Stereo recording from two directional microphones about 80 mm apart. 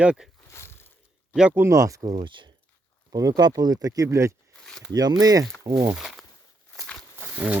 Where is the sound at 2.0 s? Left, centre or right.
Right.